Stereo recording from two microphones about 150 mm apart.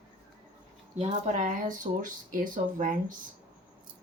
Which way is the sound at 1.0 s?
50° right (ahead or behind).